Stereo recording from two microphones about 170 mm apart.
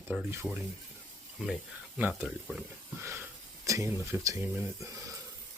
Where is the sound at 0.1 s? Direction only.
10° right (ahead or behind).